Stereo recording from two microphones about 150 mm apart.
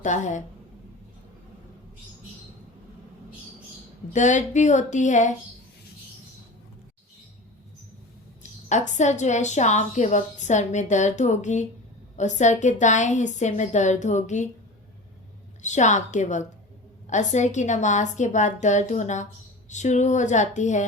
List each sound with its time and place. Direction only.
0.0 s speech: 55° left (ahead or behind)
4.1 s speech: 55° left (ahead or behind)
8.7 s a woman's voice: 55° left (ahead or behind)
15.6 s a woman's voice: 50° left (ahead or behind)